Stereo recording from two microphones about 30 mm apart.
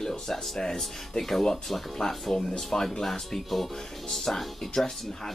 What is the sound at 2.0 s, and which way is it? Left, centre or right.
Speech, centre.